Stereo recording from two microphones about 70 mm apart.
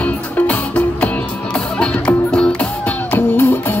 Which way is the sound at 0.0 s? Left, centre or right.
Left.